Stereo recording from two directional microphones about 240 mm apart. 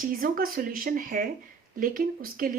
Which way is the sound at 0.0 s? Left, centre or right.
Right.